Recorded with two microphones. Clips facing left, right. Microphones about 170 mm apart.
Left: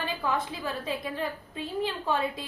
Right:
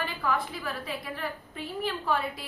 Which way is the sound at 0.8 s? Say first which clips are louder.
Left 3 dB; 20° left (ahead or behind).